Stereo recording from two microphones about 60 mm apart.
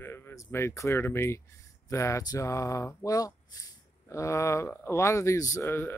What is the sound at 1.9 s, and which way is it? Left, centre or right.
Speech, left.